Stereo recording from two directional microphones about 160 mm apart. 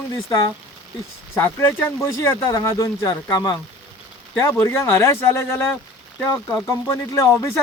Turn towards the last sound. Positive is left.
turn(degrees=15)  # may be behind; listen again after turning